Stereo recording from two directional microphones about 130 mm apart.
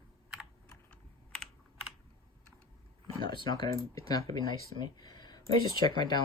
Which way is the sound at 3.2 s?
40° left (ahead or behind).